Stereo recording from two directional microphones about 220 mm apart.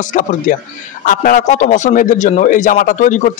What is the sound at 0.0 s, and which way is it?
A man's voice, 35° left (ahead or behind).